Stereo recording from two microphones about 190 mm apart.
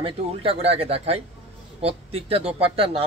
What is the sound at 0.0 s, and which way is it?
Speech, 30° right (ahead or behind).